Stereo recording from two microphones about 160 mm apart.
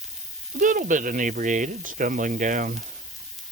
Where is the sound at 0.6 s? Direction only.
55° right (ahead or behind).